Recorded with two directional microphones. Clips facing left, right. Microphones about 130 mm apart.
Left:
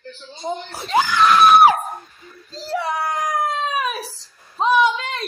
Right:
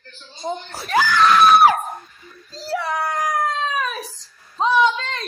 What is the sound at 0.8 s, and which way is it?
Speech, 25° left (ahead or behind).